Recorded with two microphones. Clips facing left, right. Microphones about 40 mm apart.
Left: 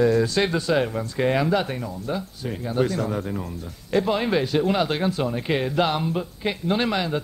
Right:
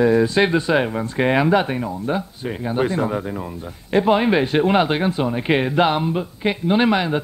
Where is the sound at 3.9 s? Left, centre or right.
Right.